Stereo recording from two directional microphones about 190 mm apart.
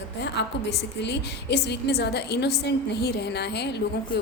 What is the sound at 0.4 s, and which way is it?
A woman's voice, 65° left (ahead or behind).